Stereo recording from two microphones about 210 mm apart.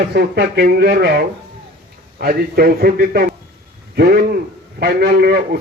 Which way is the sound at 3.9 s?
45° right (ahead or behind).